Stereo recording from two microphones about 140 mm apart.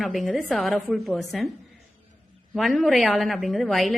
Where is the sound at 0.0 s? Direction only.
Centre (ahead or behind).